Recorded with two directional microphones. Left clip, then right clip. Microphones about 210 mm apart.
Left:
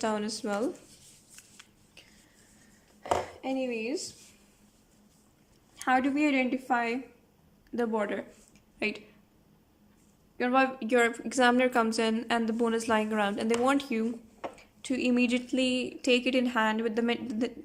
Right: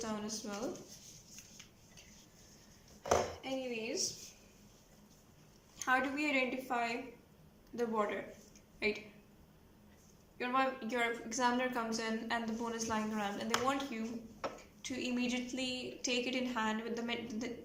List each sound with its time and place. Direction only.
0.0 s a woman's voice: 50° left (ahead or behind)
3.4 s a woman's voice: 50° left (ahead or behind)
5.7 s a woman's voice: 55° left (ahead or behind)
10.3 s a woman's voice: 55° left (ahead or behind)